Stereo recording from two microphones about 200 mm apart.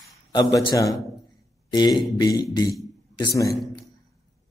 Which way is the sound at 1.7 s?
20° left (ahead or behind).